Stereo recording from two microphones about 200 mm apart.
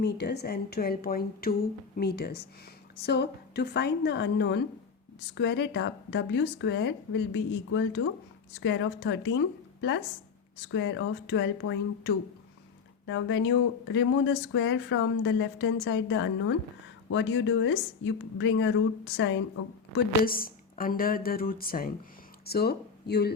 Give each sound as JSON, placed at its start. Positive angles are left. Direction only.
{"t": 0.0, "sound": "speech", "side_deg": 55}
{"t": 10.7, "sound": "speech", "side_deg": 65}
{"t": 20.2, "sound": "speech", "side_deg": 45}